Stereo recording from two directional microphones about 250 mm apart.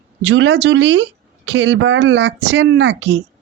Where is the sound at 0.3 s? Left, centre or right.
Right.